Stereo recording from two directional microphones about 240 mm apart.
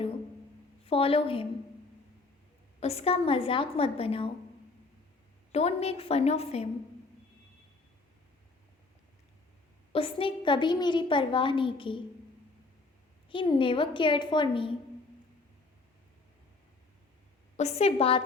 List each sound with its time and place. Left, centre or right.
0.9 s a woman's voice: left
2.8 s a woman's voice: left
5.5 s a woman's voice: left
9.9 s a woman's voice: left
13.3 s a woman's voice: left
17.6 s a woman's voice: left